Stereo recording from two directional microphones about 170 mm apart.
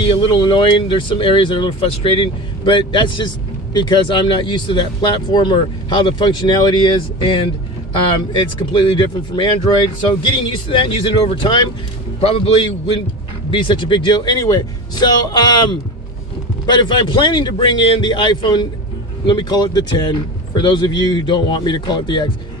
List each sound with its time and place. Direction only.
0.0 s speech: 30° left (ahead or behind)